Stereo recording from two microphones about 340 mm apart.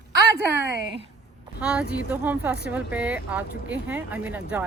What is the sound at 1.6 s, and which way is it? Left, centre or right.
Speech, centre.